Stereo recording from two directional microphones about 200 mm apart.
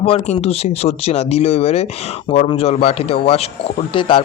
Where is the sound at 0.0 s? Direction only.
30° left (ahead or behind).